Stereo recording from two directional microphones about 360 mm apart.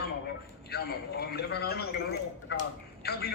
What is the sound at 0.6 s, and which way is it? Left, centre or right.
A man's voice, left.